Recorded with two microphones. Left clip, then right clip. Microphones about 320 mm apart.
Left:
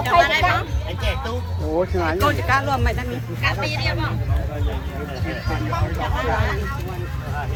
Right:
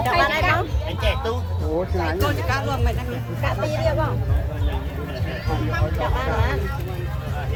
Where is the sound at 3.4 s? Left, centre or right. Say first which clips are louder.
Even; centre.